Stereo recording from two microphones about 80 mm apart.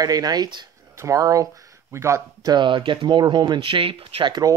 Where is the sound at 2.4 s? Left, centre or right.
Right.